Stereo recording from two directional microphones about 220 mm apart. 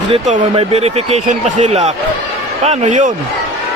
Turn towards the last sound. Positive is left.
turn(degrees=-30)  # may be behind; listen again after turning